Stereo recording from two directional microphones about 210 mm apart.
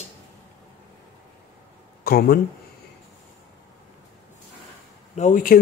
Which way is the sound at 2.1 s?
45° left (ahead or behind).